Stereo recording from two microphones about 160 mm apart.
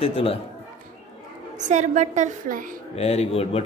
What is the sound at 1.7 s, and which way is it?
Speech, 50° right (ahead or behind).